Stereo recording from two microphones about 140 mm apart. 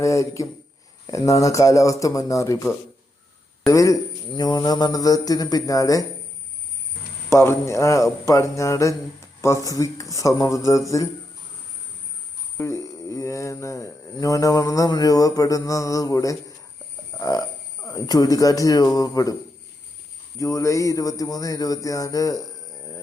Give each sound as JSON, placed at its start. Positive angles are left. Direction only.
{"t": 0.0, "sound": "speech", "side_deg": 20}
{"t": 7.3, "sound": "speech", "side_deg": 20}
{"t": 12.5, "sound": "speech", "side_deg": 20}
{"t": 17.2, "sound": "a sound", "side_deg": 25}
{"t": 17.8, "sound": "speech", "side_deg": 25}
{"t": 20.4, "sound": "speech", "side_deg": 20}